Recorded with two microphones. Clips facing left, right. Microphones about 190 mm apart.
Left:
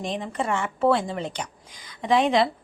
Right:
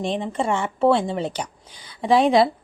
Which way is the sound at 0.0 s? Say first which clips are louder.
Right 4 dB; 30° right (ahead or behind).